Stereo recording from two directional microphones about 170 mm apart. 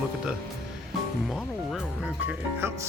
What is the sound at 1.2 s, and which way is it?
Speech, centre (ahead or behind).